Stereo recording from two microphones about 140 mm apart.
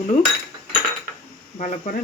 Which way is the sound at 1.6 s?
60° left (ahead or behind).